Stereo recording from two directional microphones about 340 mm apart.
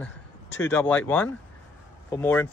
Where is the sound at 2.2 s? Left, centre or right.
Centre.